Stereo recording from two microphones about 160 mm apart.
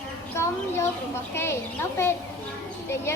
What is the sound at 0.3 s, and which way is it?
A woman's voice, 15° left (ahead or behind).